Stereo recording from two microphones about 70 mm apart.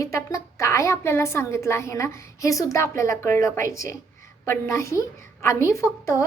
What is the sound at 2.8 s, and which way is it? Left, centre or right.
A woman's voice, left.